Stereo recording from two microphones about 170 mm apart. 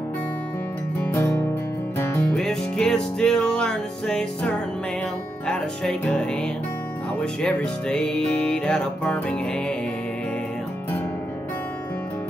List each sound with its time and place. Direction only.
1.1 s music: 15° left (ahead or behind)